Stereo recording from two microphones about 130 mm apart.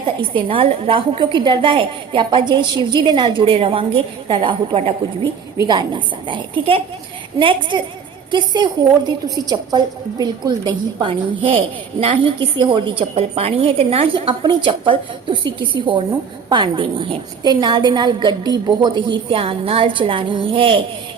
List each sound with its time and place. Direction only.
0.0 s a woman's voice: 40° right (ahead or behind)